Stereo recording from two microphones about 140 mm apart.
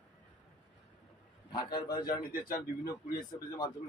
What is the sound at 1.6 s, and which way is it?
Speech, 35° left (ahead or behind).